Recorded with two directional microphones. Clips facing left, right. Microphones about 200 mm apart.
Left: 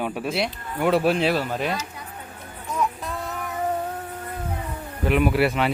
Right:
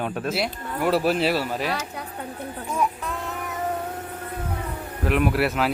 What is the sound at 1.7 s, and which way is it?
Speech, 65° right (ahead or behind).